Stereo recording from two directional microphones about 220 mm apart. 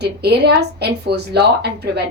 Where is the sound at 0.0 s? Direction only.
50° right (ahead or behind).